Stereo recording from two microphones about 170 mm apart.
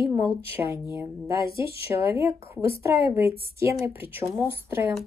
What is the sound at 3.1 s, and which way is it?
Speech, 15° right (ahead or behind).